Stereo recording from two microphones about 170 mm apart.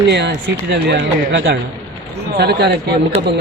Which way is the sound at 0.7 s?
85° right.